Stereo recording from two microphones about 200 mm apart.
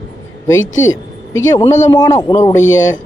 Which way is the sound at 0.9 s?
80° left.